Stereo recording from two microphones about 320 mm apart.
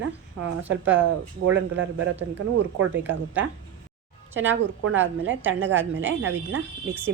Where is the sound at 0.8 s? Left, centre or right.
Right.